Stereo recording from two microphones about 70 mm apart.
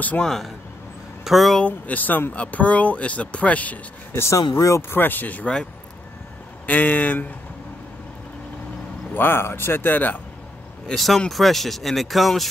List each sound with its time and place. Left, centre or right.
0.2 s speech: centre
1.6 s speech: left
4.1 s speech: left
4.4 s speech: left
4.6 s speech: left
4.9 s speech: left
6.6 s speech: left
9.1 s speech: left
11.0 s speech: centre